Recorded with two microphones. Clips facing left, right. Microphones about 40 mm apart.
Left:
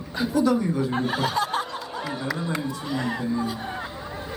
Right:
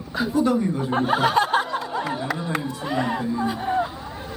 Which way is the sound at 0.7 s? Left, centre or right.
Right.